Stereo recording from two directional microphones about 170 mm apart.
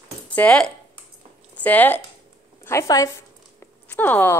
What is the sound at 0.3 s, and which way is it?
A woman's voice, 10° left (ahead or behind).